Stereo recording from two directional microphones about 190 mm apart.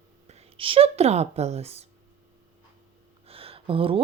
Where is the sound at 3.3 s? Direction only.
30° right (ahead or behind).